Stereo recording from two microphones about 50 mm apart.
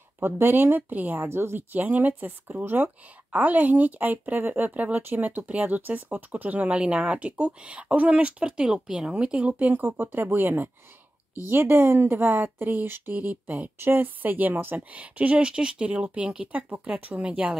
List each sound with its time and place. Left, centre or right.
0.2 s speech: right
1.3 s speech: right
1.7 s speech: right
13.7 s speech: right
14.8 s speech: right
16.5 s speech: right